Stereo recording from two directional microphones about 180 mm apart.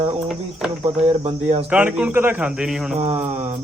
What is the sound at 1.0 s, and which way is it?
Speech, 35° right (ahead or behind).